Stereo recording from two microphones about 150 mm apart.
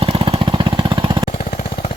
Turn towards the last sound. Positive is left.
turn(degrees=-30)  # may be behind; listen again after turning